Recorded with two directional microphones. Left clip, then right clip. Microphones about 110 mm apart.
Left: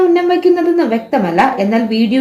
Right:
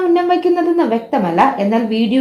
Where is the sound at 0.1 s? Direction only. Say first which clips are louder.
Left 2 dB; 30° right (ahead or behind).